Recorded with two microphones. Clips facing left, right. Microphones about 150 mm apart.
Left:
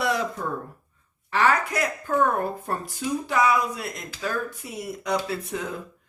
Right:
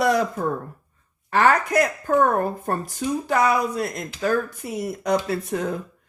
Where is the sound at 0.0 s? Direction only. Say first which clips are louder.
Right 5 dB; 45° right (ahead or behind).